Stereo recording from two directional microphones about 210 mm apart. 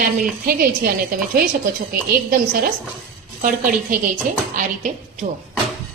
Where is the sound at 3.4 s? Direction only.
40° right (ahead or behind).